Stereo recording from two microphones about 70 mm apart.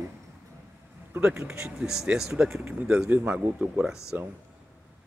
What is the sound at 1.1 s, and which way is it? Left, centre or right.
Speech, right.